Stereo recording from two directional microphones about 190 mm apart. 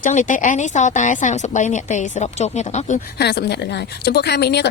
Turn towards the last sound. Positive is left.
turn(degrees=60)  # may be behind; listen again after turning